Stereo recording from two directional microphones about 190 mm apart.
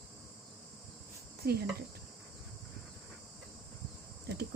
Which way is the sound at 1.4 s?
55° right (ahead or behind).